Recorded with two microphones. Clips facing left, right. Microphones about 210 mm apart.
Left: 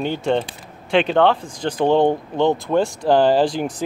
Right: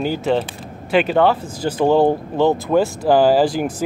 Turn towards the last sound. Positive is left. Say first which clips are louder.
# right 2 dB
turn(degrees=-5)  # may be behind; listen again after turning